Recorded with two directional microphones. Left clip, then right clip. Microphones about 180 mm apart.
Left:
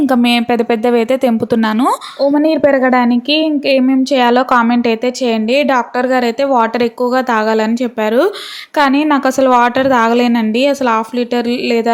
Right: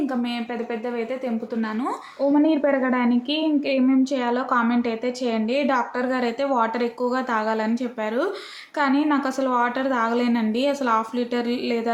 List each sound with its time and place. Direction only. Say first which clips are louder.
0.0 s speech: left 14 dB; 55° left (ahead or behind)
2.3 s a woman's voice: left 8 dB; 35° left (ahead or behind)